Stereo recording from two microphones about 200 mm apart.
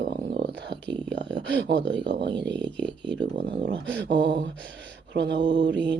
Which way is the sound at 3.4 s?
50° right (ahead or behind).